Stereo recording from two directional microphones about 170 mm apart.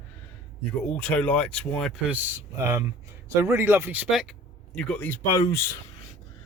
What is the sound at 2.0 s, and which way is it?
Speech, 10° right (ahead or behind).